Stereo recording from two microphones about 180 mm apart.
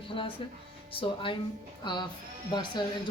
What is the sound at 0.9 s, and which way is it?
Speech, 30° left (ahead or behind).